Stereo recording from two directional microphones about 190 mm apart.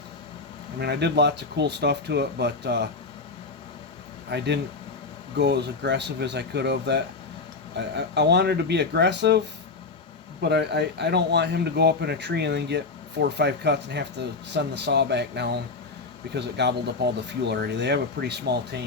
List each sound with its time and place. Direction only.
0.8 s speech: 60° right (ahead or behind)
4.3 s speech: 65° right (ahead or behind)
10.4 s speech: 60° right (ahead or behind)